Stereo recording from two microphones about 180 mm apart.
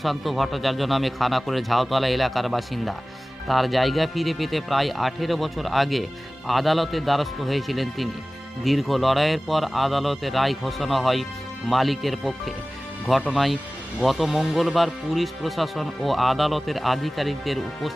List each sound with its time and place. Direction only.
0.0 s speech: centre (ahead or behind)